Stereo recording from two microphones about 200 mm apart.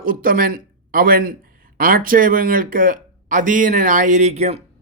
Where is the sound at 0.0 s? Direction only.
45° right (ahead or behind).